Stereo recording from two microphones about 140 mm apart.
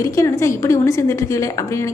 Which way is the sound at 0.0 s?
20° left (ahead or behind).